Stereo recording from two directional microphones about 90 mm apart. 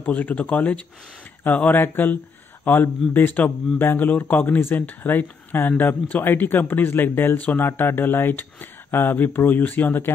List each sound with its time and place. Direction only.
0.0 s speech: 15° left (ahead or behind)